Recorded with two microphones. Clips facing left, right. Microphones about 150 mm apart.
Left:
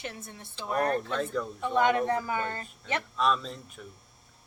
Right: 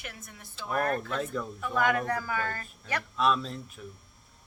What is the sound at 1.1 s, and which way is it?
Speech, 5° right (ahead or behind).